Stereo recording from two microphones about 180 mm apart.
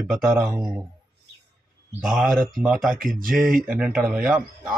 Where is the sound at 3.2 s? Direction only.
50° right (ahead or behind).